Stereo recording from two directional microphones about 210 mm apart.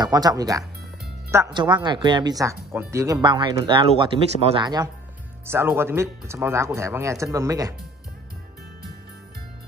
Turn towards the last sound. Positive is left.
turn(degrees=-15)  # may be behind; listen again after turning